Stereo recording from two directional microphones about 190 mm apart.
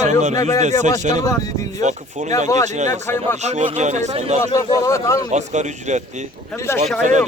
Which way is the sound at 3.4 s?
35° right (ahead or behind).